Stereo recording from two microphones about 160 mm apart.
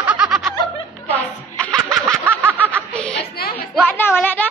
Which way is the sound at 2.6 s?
5° left (ahead or behind).